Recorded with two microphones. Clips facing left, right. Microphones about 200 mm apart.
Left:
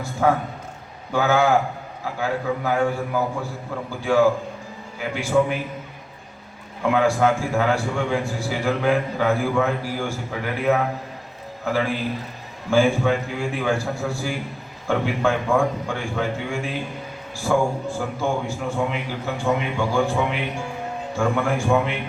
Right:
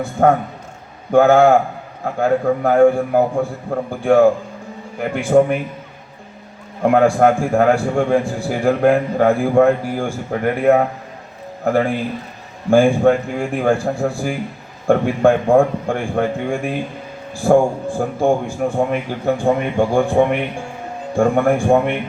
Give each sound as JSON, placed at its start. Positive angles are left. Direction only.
{"t": 0.0, "sound": "a man's voice", "side_deg": -55}
{"t": 6.8, "sound": "a man's voice", "side_deg": -55}